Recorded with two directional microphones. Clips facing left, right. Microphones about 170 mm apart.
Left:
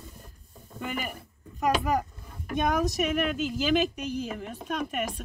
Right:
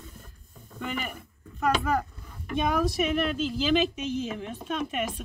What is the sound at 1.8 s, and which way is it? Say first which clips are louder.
Speech: even; 15° left (ahead or behind).